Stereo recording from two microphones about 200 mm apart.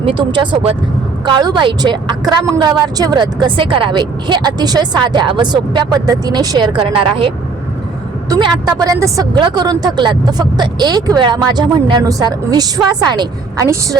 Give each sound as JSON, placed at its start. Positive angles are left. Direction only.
{"t": 0.0, "sound": "a woman's voice", "side_deg": -25}